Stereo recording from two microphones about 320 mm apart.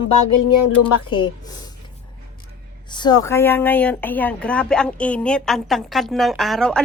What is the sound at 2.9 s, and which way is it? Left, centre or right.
Speech, centre.